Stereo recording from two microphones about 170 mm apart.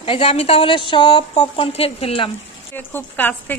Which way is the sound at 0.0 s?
35° left (ahead or behind).